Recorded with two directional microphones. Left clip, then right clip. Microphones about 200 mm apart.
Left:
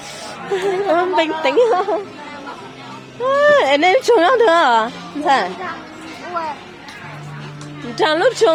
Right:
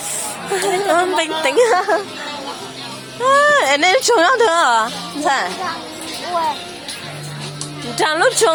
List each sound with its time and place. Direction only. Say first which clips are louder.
0.5 s a woman's voice: right 1 dB; 25° left (ahead or behind)
3.2 s speech: even; 20° left (ahead or behind)
7.9 s speech: even; 30° left (ahead or behind)